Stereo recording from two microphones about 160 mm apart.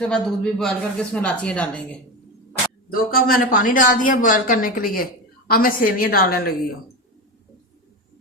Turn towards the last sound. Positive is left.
turn(degrees=70)  # may be behind; listen again after turning